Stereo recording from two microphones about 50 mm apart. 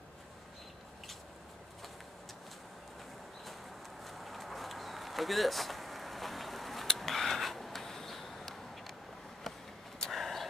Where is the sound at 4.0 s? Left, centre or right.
Centre.